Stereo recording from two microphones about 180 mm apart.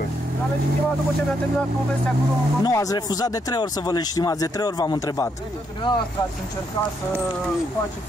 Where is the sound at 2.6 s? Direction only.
20° left (ahead or behind).